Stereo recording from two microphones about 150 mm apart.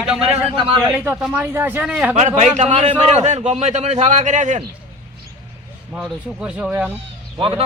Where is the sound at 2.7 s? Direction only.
45° right (ahead or behind).